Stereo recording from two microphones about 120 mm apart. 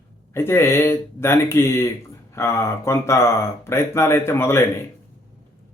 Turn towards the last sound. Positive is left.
turn(degrees=20)  # may be behind; listen again after turning